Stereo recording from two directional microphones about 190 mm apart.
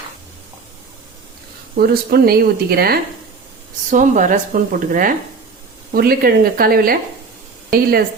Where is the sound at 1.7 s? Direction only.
55° right (ahead or behind).